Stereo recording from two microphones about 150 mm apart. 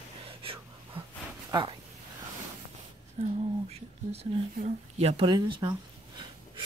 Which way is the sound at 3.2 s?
45° right (ahead or behind).